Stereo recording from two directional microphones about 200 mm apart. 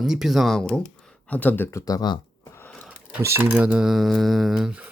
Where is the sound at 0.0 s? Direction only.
Centre (ahead or behind).